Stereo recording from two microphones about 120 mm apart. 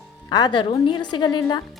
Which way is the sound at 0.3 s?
35° left (ahead or behind).